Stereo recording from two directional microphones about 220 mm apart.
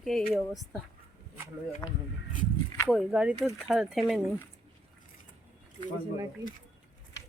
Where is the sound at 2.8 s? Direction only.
5° right (ahead or behind).